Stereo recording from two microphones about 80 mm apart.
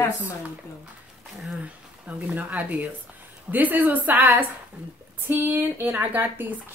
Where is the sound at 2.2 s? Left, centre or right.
Centre.